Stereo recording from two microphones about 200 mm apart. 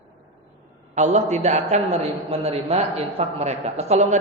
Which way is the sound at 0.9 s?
35° right (ahead or behind).